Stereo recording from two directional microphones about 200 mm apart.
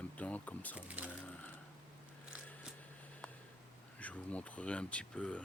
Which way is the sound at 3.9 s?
5° left (ahead or behind).